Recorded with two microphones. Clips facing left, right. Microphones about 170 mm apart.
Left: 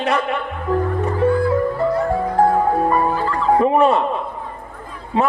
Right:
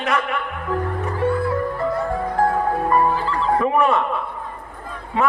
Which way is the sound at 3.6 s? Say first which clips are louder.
Left 4 dB; 30° left (ahead or behind).